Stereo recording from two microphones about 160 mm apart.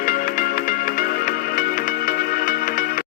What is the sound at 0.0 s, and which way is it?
Music, 65° left (ahead or behind).